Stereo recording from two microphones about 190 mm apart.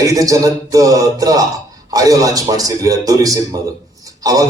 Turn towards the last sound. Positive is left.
turn(degrees=-20)  # may be behind; listen again after turning